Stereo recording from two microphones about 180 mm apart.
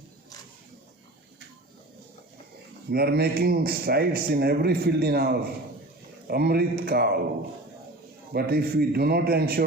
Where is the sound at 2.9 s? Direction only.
60° right (ahead or behind).